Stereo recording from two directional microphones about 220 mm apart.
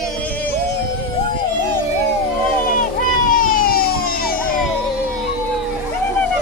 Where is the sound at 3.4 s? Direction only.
40° left (ahead or behind).